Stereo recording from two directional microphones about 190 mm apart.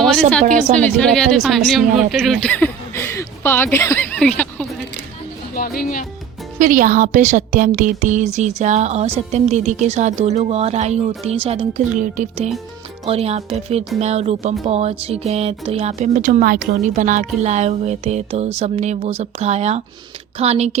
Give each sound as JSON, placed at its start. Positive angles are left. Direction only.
{"t": 0.0, "sound": "speech", "side_deg": 0}
{"t": 5.5, "sound": "speech", "side_deg": 50}
{"t": 6.6, "sound": "speech", "side_deg": -45}